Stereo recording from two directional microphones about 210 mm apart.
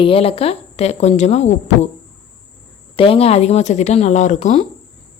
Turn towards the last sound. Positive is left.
turn(degrees=35)  # may be behind; listen again after turning